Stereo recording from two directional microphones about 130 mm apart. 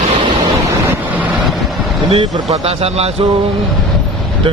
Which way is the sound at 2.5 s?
50° right (ahead or behind).